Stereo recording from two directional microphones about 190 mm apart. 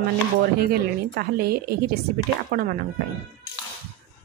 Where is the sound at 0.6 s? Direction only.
55° right (ahead or behind).